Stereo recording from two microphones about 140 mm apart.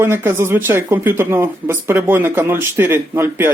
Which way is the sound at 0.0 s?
15° right (ahead or behind).